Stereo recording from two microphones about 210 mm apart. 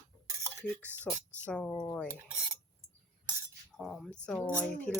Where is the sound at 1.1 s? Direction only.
5° left (ahead or behind).